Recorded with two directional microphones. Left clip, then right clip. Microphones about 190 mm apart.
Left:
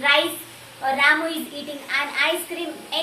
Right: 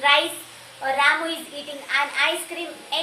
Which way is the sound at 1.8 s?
20° right (ahead or behind).